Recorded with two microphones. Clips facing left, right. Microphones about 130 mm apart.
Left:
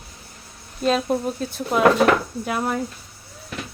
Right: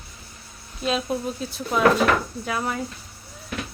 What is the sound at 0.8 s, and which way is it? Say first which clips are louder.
Speech: left 4 dB; 45° left (ahead or behind).